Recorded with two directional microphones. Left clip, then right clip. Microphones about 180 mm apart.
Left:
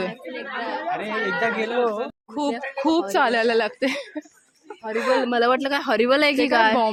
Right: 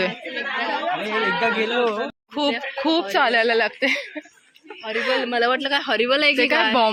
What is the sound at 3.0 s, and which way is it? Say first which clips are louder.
A woman's voice: right 2 dB; 35° left (ahead or behind).